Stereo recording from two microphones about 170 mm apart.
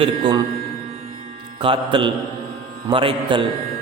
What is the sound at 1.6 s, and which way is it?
Mantra, 30° right (ahead or behind).